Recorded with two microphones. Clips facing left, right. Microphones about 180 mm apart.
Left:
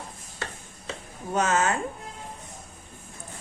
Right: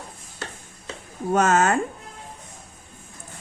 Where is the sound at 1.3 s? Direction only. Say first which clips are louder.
Right 5 dB; 50° right (ahead or behind).